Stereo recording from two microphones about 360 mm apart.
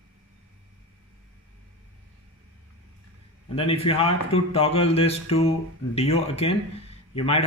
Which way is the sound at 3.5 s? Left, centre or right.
Centre.